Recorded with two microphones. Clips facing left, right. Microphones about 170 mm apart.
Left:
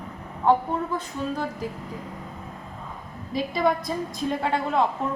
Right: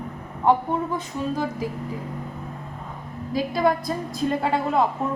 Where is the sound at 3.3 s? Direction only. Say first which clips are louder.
Right 2 dB; centre (ahead or behind).